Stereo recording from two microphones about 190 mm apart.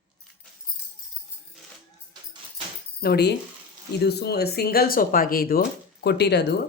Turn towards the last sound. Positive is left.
turn(degrees=60)  # may be behind; listen again after turning